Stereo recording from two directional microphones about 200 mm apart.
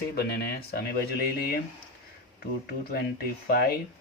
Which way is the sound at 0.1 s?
50° left (ahead or behind).